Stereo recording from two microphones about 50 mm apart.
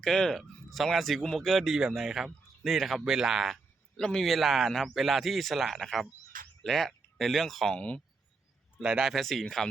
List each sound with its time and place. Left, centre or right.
0.0 s speech: centre
3.9 s speech: centre
7.8 s speech: left
8.8 s speech: centre
9.1 s speech: centre